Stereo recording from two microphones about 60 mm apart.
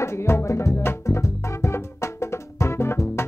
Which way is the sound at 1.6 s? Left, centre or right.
Left.